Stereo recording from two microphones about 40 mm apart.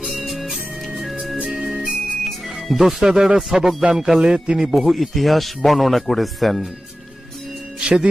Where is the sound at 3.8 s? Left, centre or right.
Centre.